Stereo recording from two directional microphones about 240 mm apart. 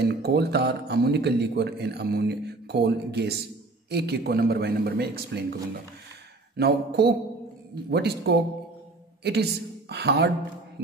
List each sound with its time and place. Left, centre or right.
0.1 s a man's voice: right
6.5 s a man's voice: right